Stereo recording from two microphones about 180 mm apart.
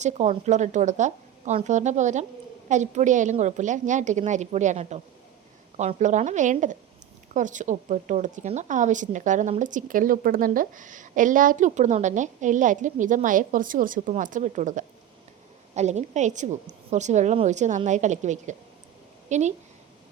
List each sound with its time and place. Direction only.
0.0 s a woman's voice: 40° right (ahead or behind)